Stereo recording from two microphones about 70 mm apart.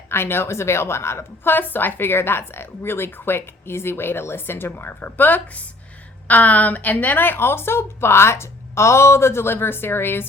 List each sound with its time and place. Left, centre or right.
0.1 s a woman's voice: left